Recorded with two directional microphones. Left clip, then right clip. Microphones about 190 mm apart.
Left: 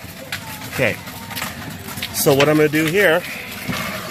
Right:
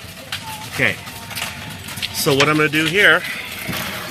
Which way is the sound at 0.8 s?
30° left (ahead or behind).